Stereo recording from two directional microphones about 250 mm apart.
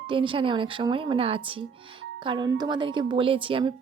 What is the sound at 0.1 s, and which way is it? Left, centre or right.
A woman's voice, right.